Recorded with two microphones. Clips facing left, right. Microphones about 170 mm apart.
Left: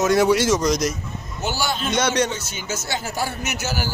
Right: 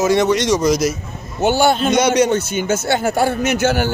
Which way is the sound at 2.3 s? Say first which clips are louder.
Right 12 dB; 55° right (ahead or behind).